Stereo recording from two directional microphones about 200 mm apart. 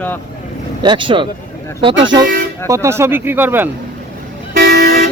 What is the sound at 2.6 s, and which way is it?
Speech, 15° right (ahead or behind).